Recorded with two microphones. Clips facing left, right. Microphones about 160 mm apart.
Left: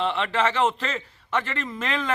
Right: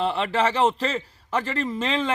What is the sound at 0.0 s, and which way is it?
A man's voice, 35° right (ahead or behind).